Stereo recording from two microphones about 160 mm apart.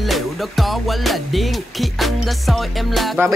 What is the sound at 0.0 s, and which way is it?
Music, centre (ahead or behind).